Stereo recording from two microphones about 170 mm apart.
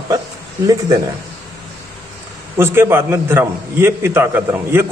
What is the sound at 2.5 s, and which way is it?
A man's voice, 15° right (ahead or behind).